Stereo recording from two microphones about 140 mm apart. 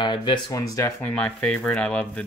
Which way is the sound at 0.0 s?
30° left (ahead or behind).